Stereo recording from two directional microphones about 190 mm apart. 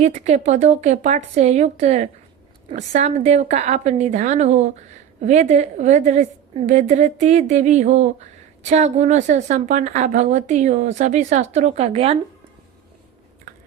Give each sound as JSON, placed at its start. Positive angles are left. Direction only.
{"t": 0.0, "sound": "a woman's voice", "side_deg": -40}